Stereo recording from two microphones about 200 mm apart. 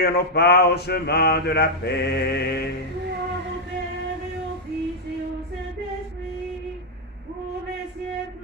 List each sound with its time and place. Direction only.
0.0 s mantra: 55° left (ahead or behind)